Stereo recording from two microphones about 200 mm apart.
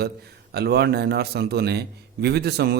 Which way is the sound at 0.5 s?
55° right (ahead or behind).